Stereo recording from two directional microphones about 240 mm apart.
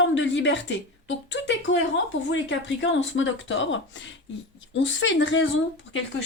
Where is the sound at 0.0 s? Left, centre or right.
Left.